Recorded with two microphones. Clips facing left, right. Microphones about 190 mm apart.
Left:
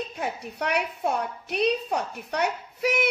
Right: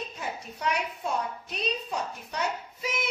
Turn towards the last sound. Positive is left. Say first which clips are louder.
# left 8 dB
turn(degrees=65)  # may be behind; listen again after turning